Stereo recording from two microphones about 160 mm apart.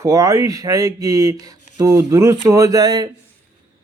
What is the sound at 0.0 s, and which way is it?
Speech, 20° right (ahead or behind).